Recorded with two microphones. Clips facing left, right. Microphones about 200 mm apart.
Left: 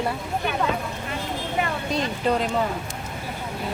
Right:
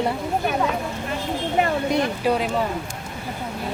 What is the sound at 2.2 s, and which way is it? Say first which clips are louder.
Speech: left 1 dB; 5° right (ahead or behind).